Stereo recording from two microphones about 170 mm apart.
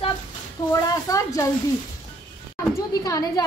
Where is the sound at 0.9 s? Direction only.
20° left (ahead or behind).